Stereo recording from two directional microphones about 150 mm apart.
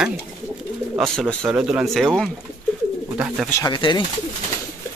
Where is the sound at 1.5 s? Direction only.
5° right (ahead or behind).